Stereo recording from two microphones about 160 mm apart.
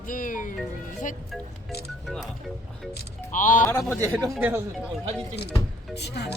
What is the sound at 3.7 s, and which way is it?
Speech, 15° left (ahead or behind).